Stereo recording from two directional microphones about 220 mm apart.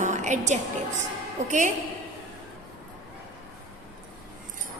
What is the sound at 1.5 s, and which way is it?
Speech, 35° right (ahead or behind).